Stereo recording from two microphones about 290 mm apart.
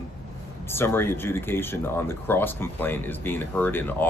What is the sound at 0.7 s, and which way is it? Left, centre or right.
Speech, centre.